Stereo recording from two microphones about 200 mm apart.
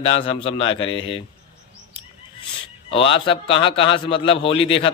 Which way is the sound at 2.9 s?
25° left (ahead or behind).